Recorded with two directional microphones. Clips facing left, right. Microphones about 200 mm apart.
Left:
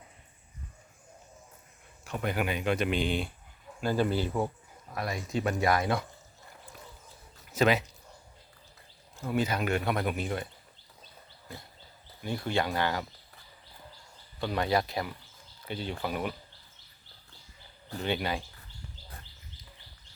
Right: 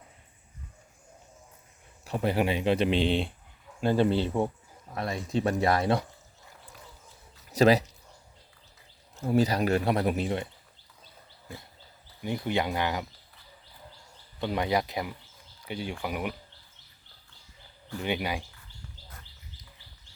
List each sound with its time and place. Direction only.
2.0 s a man's voice: 30° right (ahead or behind)
7.5 s a man's voice: 35° right (ahead or behind)
9.2 s a man's voice: 35° right (ahead or behind)
12.2 s speech: 15° right (ahead or behind)
14.4 s speech: 15° right (ahead or behind)
18.0 s speech: 15° right (ahead or behind)